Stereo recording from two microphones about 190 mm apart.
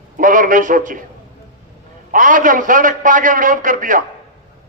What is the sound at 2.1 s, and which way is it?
A man's voice, 45° right (ahead or behind).